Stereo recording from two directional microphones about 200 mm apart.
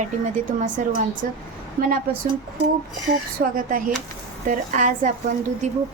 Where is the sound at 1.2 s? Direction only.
45° right (ahead or behind).